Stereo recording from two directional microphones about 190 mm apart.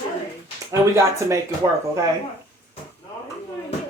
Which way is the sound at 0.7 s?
15° right (ahead or behind).